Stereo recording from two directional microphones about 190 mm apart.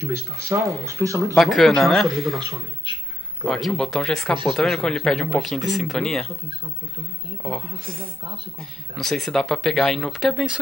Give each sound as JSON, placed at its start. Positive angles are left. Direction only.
{"t": 0.0, "sound": "speech", "side_deg": -15}
{"t": 1.3, "sound": "speech", "side_deg": 0}
{"t": 7.4, "sound": "speech", "side_deg": 5}